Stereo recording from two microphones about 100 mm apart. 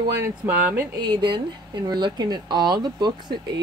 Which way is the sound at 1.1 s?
55° right (ahead or behind).